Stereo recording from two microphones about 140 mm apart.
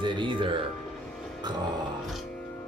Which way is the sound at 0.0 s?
35° right (ahead or behind).